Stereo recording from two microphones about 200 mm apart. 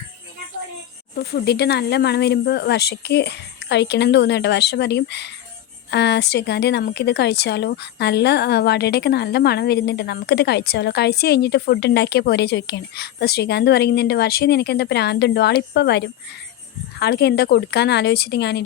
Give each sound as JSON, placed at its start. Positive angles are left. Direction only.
{"t": 1.1, "sound": "a woman's voice", "side_deg": 55}